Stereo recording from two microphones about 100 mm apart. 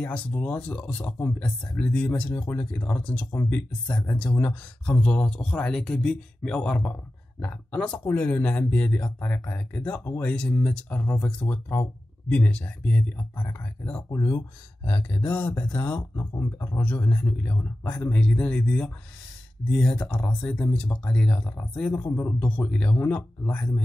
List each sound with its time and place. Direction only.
0.0 s speech: 15° left (ahead or behind)
14.1 s speech: 25° left (ahead or behind)